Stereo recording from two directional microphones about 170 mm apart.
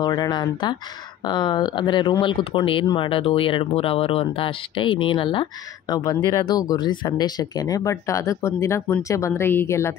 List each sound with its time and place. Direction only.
0.0 s speech: 25° left (ahead or behind)